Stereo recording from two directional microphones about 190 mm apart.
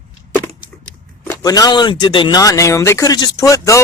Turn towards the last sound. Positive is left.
turn(degrees=15)  # may be behind; listen again after turning